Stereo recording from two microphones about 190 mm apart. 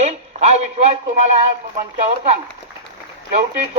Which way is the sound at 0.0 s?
35° right (ahead or behind).